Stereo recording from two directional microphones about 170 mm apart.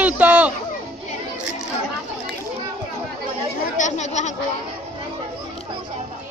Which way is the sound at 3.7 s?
45° left (ahead or behind).